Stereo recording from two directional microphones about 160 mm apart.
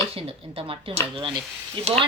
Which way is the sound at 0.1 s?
35° right (ahead or behind).